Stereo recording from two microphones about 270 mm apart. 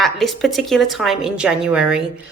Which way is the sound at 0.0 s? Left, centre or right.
Centre.